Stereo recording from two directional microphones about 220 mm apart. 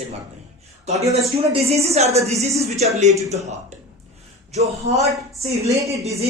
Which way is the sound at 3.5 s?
30° right (ahead or behind).